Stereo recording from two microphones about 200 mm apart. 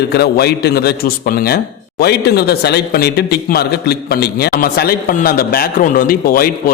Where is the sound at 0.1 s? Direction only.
55° left (ahead or behind).